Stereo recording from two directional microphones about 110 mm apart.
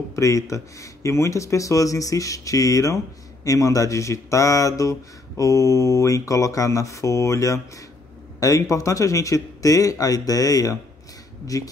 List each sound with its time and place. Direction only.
0.1 s speech: 30° left (ahead or behind)